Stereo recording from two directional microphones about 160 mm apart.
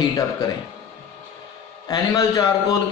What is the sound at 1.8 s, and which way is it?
Speech, 25° left (ahead or behind).